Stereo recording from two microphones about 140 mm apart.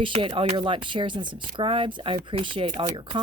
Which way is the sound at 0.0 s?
35° right (ahead or behind).